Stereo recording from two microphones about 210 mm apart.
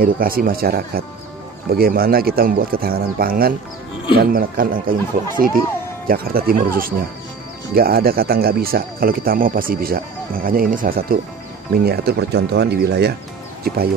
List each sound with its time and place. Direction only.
0.0 s speech: 45° right (ahead or behind)